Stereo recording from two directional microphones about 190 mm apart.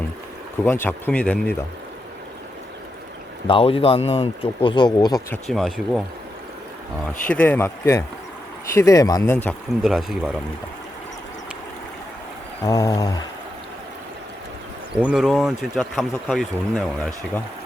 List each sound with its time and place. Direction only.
0.6 s speech: 10° left (ahead or behind)
3.4 s speech: 30° left (ahead or behind)
5.3 s speech: centre (ahead or behind)
7.3 s speech: 10° left (ahead or behind)
9.8 s speech: 5° right (ahead or behind)
12.6 s speech: 15° left (ahead or behind)
15.0 s speech: centre (ahead or behind)